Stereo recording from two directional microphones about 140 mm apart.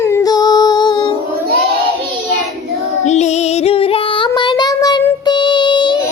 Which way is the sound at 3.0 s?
55° left (ahead or behind).